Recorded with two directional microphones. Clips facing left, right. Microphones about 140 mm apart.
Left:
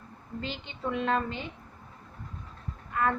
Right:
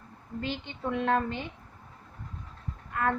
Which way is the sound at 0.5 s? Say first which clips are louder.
Even; 50° right (ahead or behind).